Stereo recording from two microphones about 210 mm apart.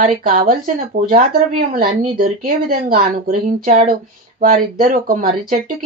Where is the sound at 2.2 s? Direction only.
45° right (ahead or behind).